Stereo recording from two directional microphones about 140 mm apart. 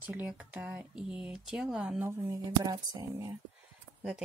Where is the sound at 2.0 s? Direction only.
20° right (ahead or behind).